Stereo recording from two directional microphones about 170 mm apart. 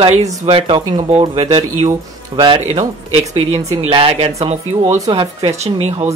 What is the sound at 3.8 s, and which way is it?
Speech, 35° right (ahead or behind).